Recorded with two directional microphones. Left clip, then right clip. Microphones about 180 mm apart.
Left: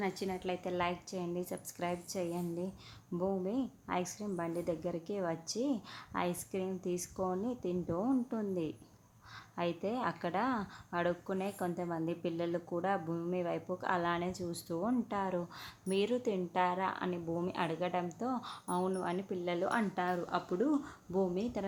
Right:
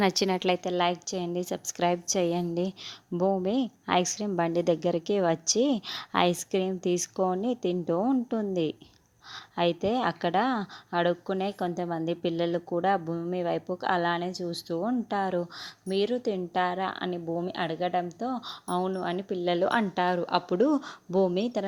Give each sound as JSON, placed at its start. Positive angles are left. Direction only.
{"t": 0.0, "sound": "a woman's voice", "side_deg": -60}
{"t": 0.6, "sound": "a woman's voice", "side_deg": -40}